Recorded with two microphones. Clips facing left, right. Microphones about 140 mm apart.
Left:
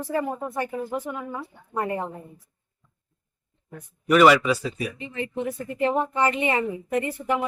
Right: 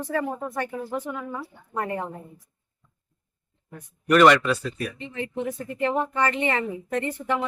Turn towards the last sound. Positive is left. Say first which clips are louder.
# left 1 dB
turn(degrees=15)  # may be behind; listen again after turning